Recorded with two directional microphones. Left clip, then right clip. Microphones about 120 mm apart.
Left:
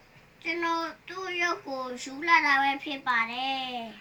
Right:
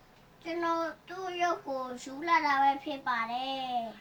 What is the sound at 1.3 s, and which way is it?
A woman's voice, 15° right (ahead or behind).